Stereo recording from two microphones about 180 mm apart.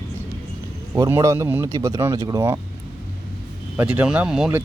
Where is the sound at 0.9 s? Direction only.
20° right (ahead or behind).